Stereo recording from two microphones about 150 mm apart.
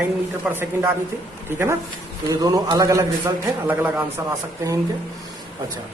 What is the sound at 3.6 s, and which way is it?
Speech, 10° right (ahead or behind).